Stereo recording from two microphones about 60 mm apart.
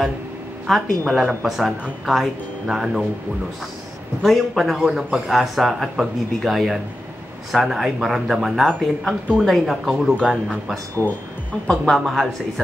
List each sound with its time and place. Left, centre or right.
0.7 s speech: centre
4.2 s speech: centre
11.0 s speech: right
11.8 s speech: centre